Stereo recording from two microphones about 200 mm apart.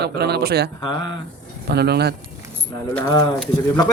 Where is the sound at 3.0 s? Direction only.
15° left (ahead or behind).